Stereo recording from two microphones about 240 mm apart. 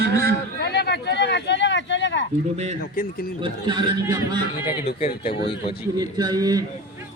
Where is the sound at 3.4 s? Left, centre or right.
Centre.